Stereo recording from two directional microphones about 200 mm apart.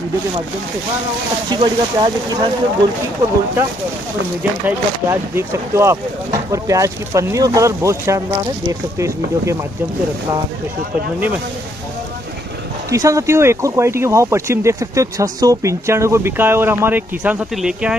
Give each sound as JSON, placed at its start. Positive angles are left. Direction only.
{"t": 1.5, "sound": "speech", "side_deg": -25}
{"t": 4.4, "sound": "speech", "side_deg": -10}
{"t": 12.9, "sound": "speech", "side_deg": -15}